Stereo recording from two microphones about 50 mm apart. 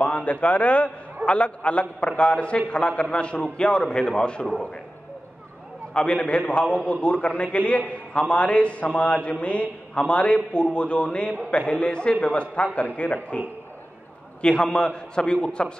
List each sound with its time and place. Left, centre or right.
0.0 s a man's voice: left
5.9 s a man's voice: centre
6.4 s a man's voice: left
14.4 s a man's voice: centre